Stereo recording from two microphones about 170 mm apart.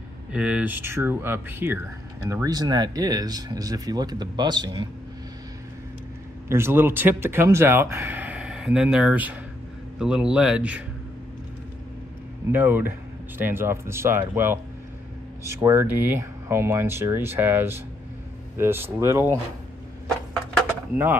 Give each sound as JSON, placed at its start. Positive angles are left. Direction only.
{"t": 0.3, "sound": "speech", "side_deg": -5}
{"t": 6.5, "sound": "speech", "side_deg": -15}
{"t": 12.4, "sound": "speech", "side_deg": -10}
{"t": 20.9, "sound": "speech", "side_deg": -10}